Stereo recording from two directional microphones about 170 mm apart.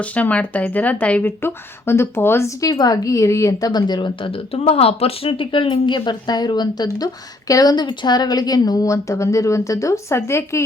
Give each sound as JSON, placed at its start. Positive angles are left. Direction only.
{"t": 0.0, "sound": "speech", "side_deg": 10}